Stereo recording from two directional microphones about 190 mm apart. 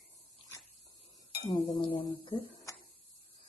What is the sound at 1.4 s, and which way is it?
Speech, 25° left (ahead or behind).